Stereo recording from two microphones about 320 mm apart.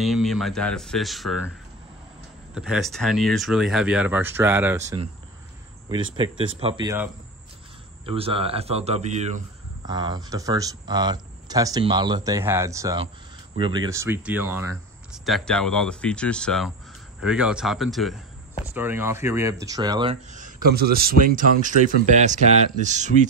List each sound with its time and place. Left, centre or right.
0.0 s speech: centre
2.5 s speech: centre; by 23.1 s right